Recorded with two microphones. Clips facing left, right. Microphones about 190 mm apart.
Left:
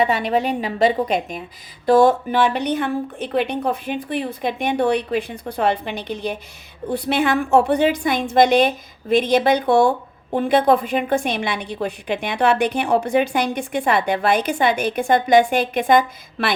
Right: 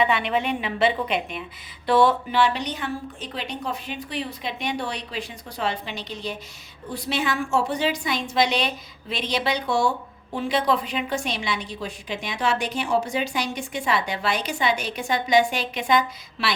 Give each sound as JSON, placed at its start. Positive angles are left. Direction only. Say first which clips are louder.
{"t": 0.0, "sound": "a woman's voice", "louder": "left 4 dB", "side_deg": 40}